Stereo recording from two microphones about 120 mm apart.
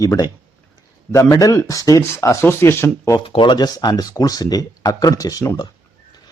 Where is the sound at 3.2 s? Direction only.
45° left (ahead or behind).